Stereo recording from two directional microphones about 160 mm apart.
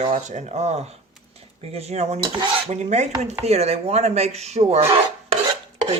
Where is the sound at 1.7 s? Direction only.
40° right (ahead or behind).